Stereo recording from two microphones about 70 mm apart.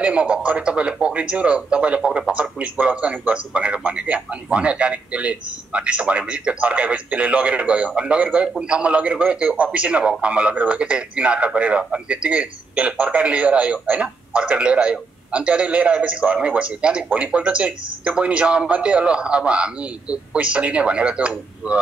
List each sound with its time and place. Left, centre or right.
0.0 s speech: centre